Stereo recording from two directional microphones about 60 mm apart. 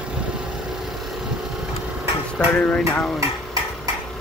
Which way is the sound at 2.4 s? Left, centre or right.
Centre.